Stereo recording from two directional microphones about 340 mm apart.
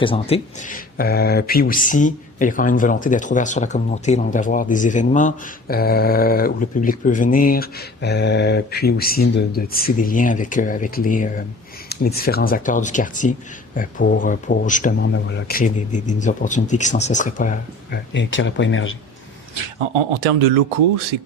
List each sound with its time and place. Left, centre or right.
0.0 s speech: centre; by 18.9 s left